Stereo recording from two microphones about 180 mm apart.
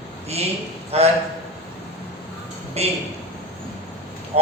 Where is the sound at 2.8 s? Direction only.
35° right (ahead or behind).